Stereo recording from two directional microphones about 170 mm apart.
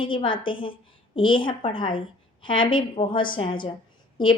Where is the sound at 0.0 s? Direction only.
30° left (ahead or behind).